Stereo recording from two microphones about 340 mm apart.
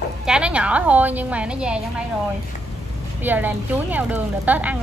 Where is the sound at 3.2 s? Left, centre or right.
Centre.